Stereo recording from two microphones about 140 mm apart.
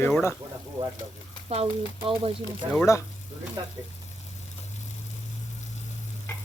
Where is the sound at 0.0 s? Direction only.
15° left (ahead or behind).